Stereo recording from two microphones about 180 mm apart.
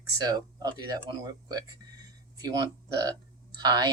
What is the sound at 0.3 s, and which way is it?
Speech, 20° right (ahead or behind).